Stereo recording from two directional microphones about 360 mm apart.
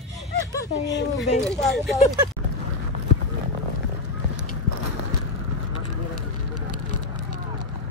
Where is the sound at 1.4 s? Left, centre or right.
Centre.